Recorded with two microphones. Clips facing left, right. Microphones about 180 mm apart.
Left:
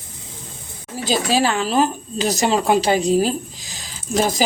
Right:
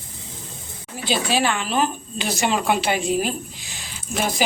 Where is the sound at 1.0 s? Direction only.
40° left (ahead or behind).